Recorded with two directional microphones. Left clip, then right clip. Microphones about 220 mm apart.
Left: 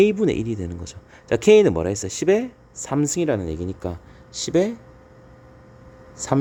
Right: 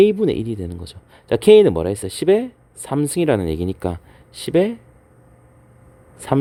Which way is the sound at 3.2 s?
15° right (ahead or behind).